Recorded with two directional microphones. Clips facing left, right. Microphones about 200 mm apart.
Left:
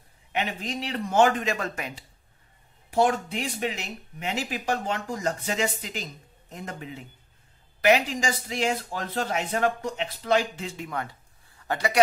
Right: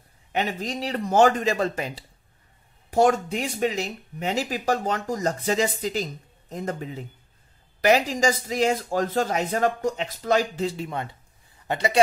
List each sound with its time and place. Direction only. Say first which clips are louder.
0.3 s speech: right 3 dB; 40° right (ahead or behind)
2.9 s speech: right 3 dB; 45° right (ahead or behind)
10.9 s a sound: right 1 dB; 25° right (ahead or behind)